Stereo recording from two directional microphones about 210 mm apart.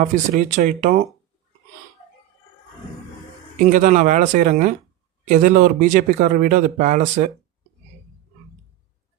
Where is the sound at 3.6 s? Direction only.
35° right (ahead or behind).